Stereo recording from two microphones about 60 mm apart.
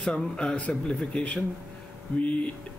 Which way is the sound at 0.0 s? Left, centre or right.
Centre.